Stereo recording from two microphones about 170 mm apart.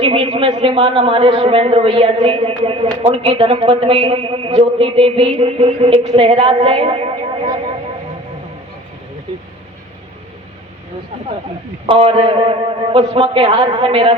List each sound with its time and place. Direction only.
0.0 s a woman's voice: 35° right (ahead or behind)
11.9 s a woman's voice: 35° right (ahead or behind)